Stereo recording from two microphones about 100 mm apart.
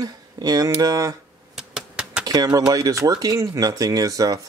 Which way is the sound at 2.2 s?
40° right (ahead or behind).